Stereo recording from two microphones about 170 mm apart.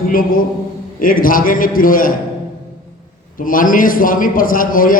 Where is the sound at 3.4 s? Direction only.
55° left (ahead or behind).